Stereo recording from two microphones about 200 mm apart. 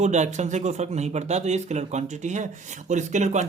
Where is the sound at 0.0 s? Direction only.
35° right (ahead or behind).